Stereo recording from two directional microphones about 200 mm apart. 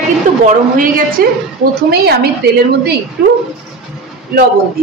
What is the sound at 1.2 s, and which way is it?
Speech, 50° right (ahead or behind).